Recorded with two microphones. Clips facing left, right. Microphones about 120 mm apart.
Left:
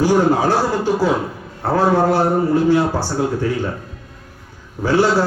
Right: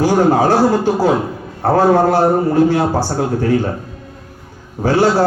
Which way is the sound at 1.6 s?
50° right (ahead or behind).